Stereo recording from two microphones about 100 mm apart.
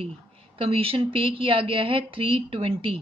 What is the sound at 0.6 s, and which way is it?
A woman's voice, 70° right (ahead or behind).